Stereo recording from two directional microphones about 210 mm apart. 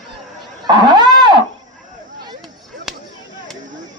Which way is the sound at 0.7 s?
20° right (ahead or behind).